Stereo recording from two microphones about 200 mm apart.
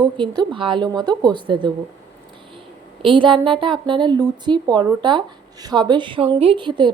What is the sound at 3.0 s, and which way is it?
A woman's voice, 25° right (ahead or behind).